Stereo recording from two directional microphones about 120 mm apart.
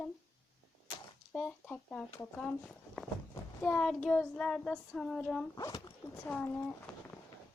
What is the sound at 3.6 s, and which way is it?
Child singing, 10° left (ahead or behind).